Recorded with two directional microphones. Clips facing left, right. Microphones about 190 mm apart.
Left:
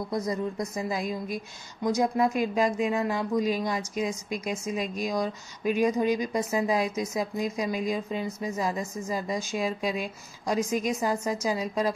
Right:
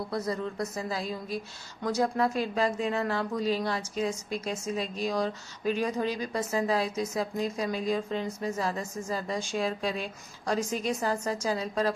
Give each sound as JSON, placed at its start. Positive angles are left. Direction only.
{"t": 0.1, "sound": "speech", "side_deg": 15}